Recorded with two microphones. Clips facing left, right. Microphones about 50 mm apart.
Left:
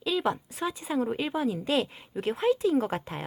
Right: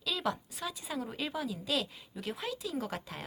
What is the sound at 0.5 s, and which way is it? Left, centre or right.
A woman's voice, left.